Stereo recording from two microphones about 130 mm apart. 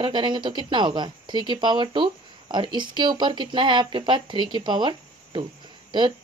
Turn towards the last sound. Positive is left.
turn(degrees=-40)  # may be behind; listen again after turning